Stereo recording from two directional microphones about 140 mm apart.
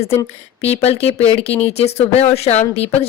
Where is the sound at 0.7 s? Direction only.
45° left (ahead or behind).